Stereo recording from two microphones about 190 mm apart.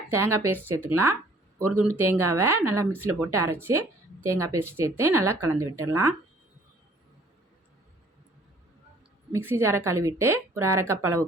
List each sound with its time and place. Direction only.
0.1 s a woman's voice: 15° right (ahead or behind)
9.3 s a woman's voice: 15° right (ahead or behind)